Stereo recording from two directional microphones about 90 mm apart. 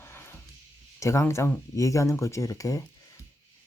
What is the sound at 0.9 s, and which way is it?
Speech, 35° left (ahead or behind).